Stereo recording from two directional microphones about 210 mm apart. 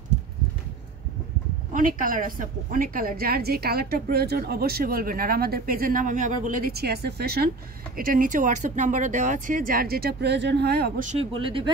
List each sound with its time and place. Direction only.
1.7 s a woman's voice: 40° right (ahead or behind)
11.1 s speech: 25° right (ahead or behind)